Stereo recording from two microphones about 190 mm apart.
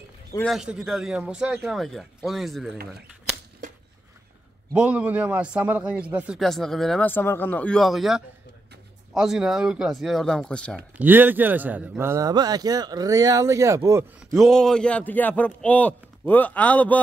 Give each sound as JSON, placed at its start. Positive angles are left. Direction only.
{"t": 0.5, "sound": "a man's voice", "side_deg": -5}
{"t": 4.7, "sound": "a man's voice", "side_deg": -10}
{"t": 11.0, "sound": "a man's voice", "side_deg": -10}
{"t": 14.3, "sound": "a man's voice", "side_deg": 0}